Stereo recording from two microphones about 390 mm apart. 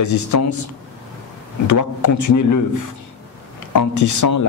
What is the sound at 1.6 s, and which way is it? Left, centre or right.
Speech, left.